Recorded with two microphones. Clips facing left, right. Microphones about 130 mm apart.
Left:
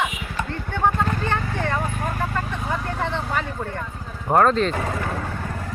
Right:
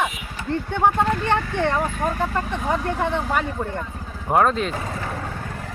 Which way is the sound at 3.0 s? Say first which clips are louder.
Right 3 dB; 15° right (ahead or behind).